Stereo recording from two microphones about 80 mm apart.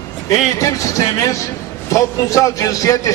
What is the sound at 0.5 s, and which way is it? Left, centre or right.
A man's voice, left.